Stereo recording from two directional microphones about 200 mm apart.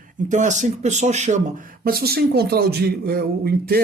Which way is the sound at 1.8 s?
50° right (ahead or behind).